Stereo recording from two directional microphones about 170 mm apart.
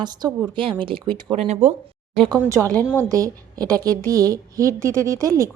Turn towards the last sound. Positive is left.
turn(degrees=-20)  # may be behind; listen again after turning